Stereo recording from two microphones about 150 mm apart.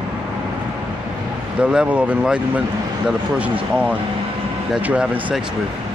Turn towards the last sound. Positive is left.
turn(degrees=-10)  # may be behind; listen again after turning